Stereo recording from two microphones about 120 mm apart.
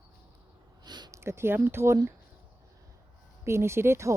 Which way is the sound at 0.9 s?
35° right (ahead or behind).